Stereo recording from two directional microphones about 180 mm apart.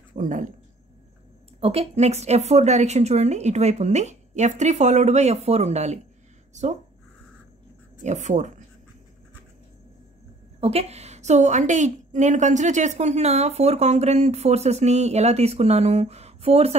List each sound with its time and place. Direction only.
0.2 s speech: 45° right (ahead or behind)
1.6 s a woman's voice: 35° right (ahead or behind)
8.0 s a woman's voice: 40° right (ahead or behind)
10.6 s a woman's voice: 35° right (ahead or behind)